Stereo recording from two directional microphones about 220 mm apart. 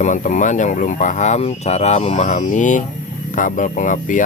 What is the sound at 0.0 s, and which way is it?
Speech, 35° left (ahead or behind).